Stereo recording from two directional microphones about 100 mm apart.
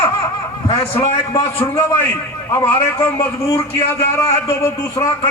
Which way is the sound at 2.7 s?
25° left (ahead or behind).